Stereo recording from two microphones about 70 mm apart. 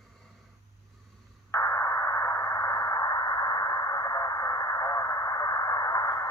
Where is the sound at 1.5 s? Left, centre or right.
Left.